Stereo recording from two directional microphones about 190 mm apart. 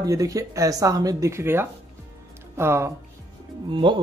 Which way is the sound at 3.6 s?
25° right (ahead or behind).